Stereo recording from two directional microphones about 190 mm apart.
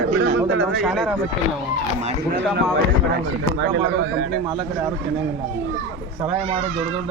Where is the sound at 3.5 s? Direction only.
75° right (ahead or behind).